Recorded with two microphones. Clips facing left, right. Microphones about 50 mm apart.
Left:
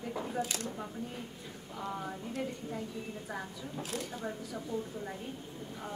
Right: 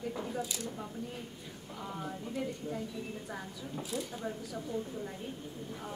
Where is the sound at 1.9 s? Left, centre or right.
Centre.